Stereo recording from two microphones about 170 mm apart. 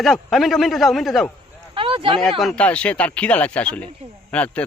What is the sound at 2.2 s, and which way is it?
Speech, centre (ahead or behind).